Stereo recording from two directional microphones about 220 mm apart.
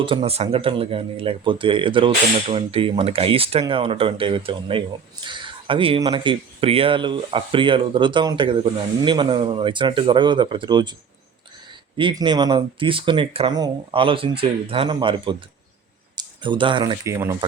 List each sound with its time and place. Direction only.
0.0 s speech: 25° right (ahead or behind)
11.9 s speech: 20° right (ahead or behind)